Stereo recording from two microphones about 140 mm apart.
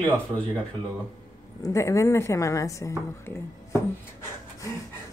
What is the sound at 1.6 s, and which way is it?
Speech, 20° left (ahead or behind).